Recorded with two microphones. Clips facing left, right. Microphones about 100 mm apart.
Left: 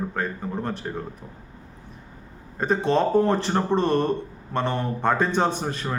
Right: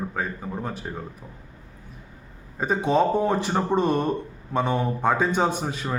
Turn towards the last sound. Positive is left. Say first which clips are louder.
# even
turn(degrees=-5)  # may be behind; listen again after turning